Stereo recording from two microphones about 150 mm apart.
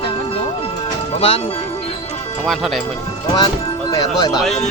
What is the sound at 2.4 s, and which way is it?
Speech, centre (ahead or behind).